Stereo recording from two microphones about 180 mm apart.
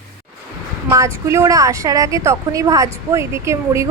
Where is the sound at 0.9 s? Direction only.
15° right (ahead or behind).